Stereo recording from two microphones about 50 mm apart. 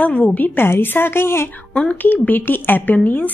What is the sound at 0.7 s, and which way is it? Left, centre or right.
Speech, left.